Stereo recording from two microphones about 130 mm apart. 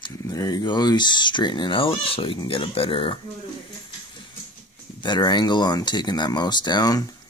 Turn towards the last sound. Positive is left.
turn(degrees=30)  # may be behind; listen again after turning